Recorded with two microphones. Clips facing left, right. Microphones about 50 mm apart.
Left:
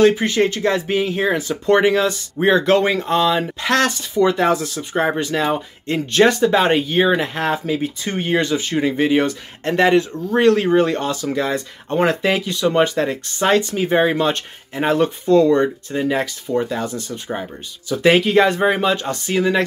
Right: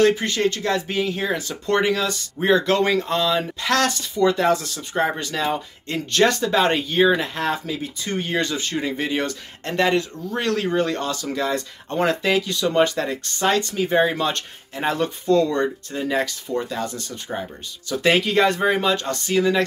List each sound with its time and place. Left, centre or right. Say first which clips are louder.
0.0 s speech: left 4 dB; centre; by 8.1 s left
8.1 s speech: left 4 dB; left
8.4 s speech: left 6 dB; centre
13.7 s speech: left 3 dB; left